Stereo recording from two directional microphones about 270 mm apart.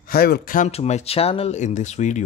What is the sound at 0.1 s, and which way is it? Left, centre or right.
Speech, left.